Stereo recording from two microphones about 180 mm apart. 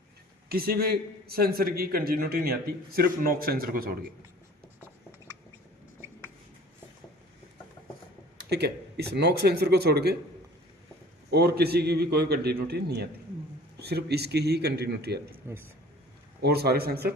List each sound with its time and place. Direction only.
0.4 s a man's voice: 55° right (ahead or behind)
8.4 s a man's voice: 65° right (ahead or behind)
11.3 s a man's voice: 60° right (ahead or behind)
15.4 s speech: 15° right (ahead or behind)
16.4 s a man's voice: 60° right (ahead or behind)